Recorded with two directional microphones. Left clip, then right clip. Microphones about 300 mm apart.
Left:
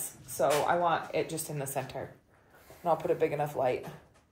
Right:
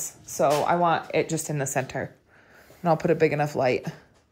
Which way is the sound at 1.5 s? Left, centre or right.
Right.